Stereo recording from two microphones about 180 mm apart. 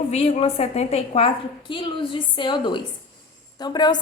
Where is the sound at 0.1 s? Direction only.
35° left (ahead or behind).